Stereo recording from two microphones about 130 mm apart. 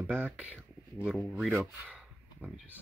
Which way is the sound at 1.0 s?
5° right (ahead or behind).